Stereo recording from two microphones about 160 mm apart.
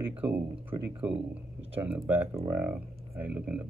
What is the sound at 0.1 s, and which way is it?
Speech, 10° right (ahead or behind).